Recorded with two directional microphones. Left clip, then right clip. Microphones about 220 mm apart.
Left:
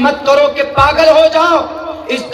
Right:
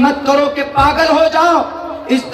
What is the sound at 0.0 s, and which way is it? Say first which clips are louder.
A man's voice: left 3 dB; 35° left (ahead or behind).